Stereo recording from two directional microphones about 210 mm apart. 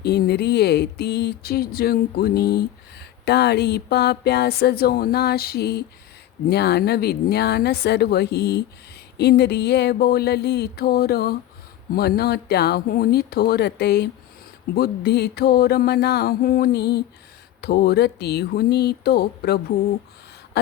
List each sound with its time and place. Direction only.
0.0 s speech: 50° left (ahead or behind)